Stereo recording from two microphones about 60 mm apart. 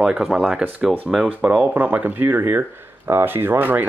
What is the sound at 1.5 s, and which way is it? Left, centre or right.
Speech, right.